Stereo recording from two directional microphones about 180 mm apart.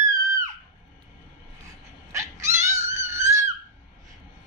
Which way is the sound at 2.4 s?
40° right (ahead or behind).